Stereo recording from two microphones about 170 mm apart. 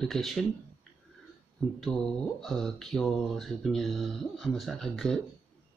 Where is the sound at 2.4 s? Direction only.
Centre (ahead or behind).